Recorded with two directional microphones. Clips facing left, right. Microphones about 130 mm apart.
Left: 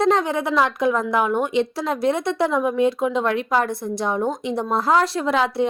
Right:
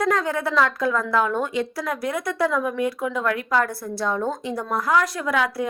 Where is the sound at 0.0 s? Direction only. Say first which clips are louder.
Left 3 dB; 25° left (ahead or behind).